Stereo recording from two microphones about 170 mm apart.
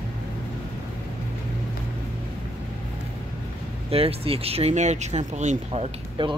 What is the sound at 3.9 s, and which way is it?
Speech, 35° right (ahead or behind).